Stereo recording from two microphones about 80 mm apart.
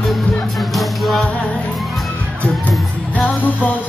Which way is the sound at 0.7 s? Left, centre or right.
Centre.